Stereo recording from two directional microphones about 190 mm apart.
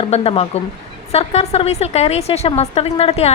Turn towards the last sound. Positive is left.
turn(degrees=35)  # may be behind; listen again after turning